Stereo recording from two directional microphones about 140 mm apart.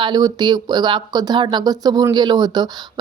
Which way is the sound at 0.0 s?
30° right (ahead or behind).